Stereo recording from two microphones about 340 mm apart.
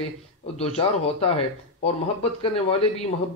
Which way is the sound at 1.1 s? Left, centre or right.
Centre.